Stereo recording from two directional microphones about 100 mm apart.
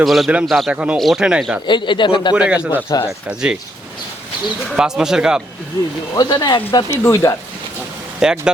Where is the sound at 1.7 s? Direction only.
50° left (ahead or behind).